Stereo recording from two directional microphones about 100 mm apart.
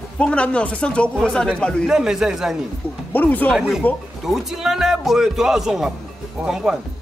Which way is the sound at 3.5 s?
5° right (ahead or behind).